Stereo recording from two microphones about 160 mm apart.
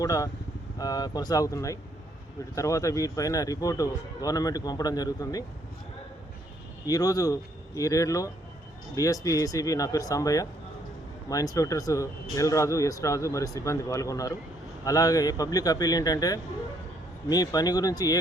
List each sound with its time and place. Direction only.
0.0 s speech: 20° left (ahead or behind)
6.8 s speech: 20° left (ahead or behind)